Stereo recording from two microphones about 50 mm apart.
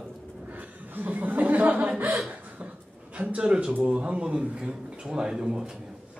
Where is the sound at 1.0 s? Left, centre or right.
Right.